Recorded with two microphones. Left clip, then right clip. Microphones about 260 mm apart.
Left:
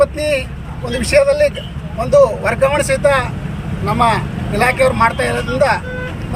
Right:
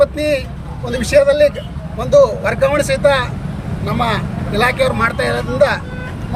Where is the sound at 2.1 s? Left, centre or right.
Centre.